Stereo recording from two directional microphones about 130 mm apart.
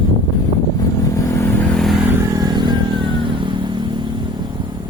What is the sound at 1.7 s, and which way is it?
Vehicle, centre (ahead or behind).